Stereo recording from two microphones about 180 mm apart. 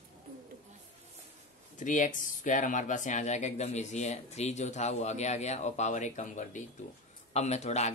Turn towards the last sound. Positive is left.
turn(degrees=40)  # may be behind; listen again after turning